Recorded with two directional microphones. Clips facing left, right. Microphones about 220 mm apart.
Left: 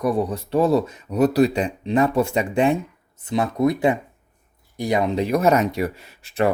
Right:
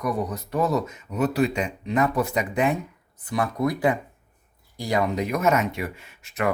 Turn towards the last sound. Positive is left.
turn(degrees=30)  # may be behind; listen again after turning